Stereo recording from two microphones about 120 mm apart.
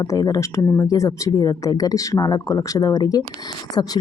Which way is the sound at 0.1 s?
25° left (ahead or behind).